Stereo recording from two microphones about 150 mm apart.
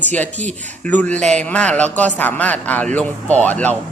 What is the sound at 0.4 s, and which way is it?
Speech, 50° right (ahead or behind).